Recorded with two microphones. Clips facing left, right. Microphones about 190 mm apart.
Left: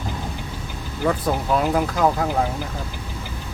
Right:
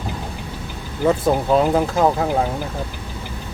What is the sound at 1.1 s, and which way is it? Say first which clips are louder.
Speech: right 5 dB; 25° right (ahead or behind).